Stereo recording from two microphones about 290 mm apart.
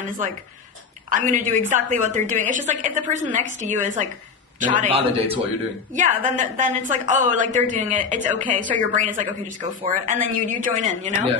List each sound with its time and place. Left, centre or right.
1.1 s a man's voice: right